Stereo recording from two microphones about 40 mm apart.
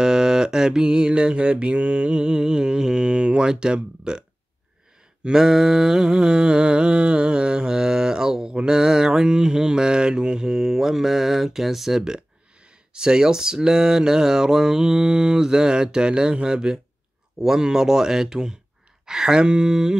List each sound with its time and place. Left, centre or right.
0.0 s mantra: centre
5.2 s mantra: centre
19.0 s a sound: centre